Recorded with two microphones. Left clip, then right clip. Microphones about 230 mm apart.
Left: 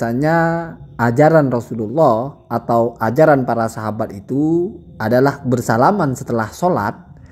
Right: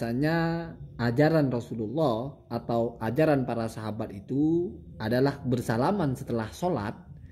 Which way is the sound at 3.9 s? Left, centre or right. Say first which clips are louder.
Left 13 dB; centre.